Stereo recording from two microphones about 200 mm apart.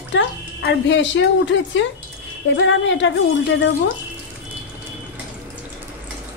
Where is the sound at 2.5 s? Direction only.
70° left (ahead or behind).